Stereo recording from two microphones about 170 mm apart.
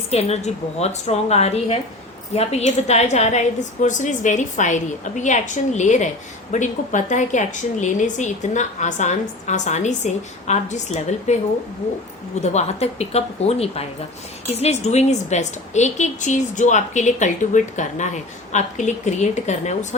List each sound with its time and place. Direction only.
0.1 s a woman's voice: 40° left (ahead or behind)
12.4 s a woman's voice: 40° left (ahead or behind)